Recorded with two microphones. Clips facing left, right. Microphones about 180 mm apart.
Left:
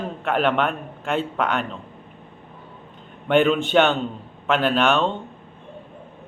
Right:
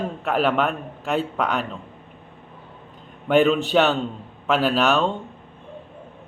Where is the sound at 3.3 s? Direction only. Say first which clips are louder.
Right 1 dB; centre (ahead or behind).